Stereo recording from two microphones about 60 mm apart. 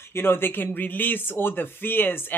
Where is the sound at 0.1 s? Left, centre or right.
Left.